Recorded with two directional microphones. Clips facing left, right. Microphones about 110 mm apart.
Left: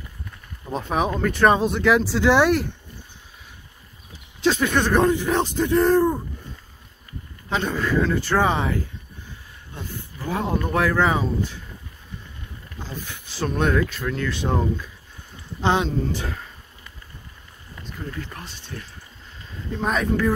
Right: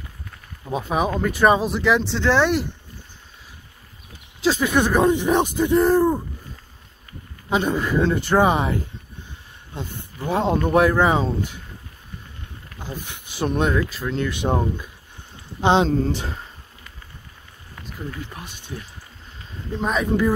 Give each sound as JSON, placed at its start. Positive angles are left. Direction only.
{"t": 0.7, "sound": "speech", "side_deg": -5}
{"t": 4.4, "sound": "speech", "side_deg": -5}
{"t": 7.4, "sound": "speech", "side_deg": -15}
{"t": 12.8, "sound": "speech", "side_deg": -15}
{"t": 13.7, "sound": "speech", "side_deg": -5}
{"t": 14.0, "sound": "speech", "side_deg": -20}
{"t": 18.2, "sound": "speech", "side_deg": -15}
{"t": 19.8, "sound": "speech", "side_deg": 0}